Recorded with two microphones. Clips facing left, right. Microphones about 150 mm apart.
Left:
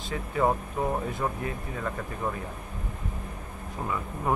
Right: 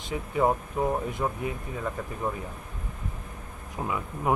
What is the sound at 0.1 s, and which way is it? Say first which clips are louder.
Speech: right 1 dB; 15° right (ahead or behind).